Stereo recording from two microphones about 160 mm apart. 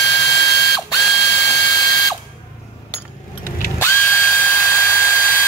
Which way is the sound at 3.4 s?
15° left (ahead or behind).